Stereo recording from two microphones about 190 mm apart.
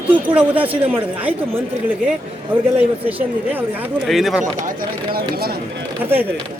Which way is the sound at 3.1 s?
10° right (ahead or behind).